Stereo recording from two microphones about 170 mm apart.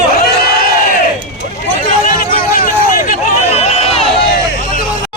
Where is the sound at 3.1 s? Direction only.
40° left (ahead or behind).